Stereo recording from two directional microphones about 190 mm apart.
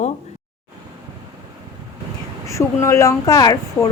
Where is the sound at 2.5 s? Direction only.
15° left (ahead or behind).